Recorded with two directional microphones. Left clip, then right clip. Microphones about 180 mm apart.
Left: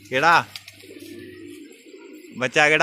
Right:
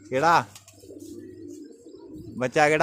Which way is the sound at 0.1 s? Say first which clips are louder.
Left 3 dB; 15° right (ahead or behind).